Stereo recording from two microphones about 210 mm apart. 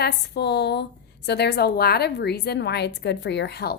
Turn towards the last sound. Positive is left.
turn(degrees=50)  # may be behind; listen again after turning